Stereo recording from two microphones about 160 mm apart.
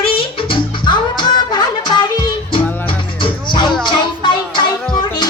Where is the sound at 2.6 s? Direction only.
10° left (ahead or behind).